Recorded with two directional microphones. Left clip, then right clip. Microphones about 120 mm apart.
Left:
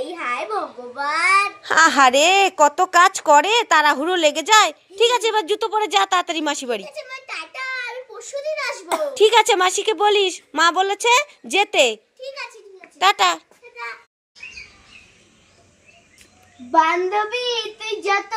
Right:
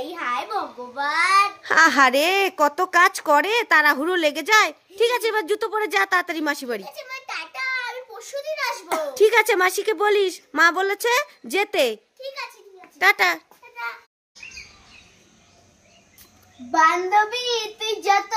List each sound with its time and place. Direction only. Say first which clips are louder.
0.1 s babbling: left 1 dB; 20° right (ahead or behind)
0.9 s a child's voice: left 1 dB; 20° right (ahead or behind)
1.6 s a woman's voice: left 3 dB; centre (ahead or behind)
7.0 s a sound: left 1 dB; 25° right (ahead or behind)
8.8 s a child's voice: left 3 dB; 20° left (ahead or behind)
9.1 s a woman's voice: left 3 dB; centre (ahead or behind)
13.0 s a woman's voice: left 2 dB; 5° right (ahead or behind)
16.7 s child singing: even; 20° right (ahead or behind)